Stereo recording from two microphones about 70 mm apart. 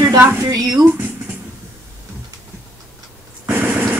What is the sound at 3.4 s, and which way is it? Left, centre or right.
Vehicle, right.